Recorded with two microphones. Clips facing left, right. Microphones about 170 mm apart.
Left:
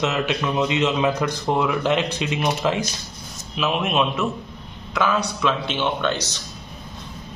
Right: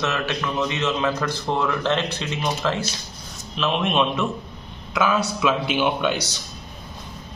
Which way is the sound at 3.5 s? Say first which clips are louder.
Even; 5° left (ahead or behind).